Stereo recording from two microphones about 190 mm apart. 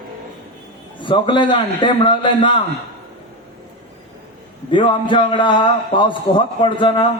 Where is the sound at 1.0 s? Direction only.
25° left (ahead or behind).